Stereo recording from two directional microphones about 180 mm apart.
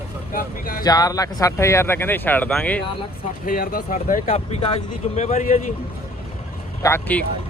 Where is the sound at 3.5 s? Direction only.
50° left (ahead or behind).